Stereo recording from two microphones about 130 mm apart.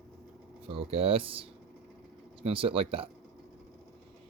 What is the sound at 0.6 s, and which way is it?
Speech, 45° right (ahead or behind).